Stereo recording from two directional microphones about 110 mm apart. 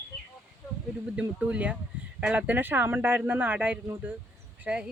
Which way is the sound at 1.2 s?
10° right (ahead or behind).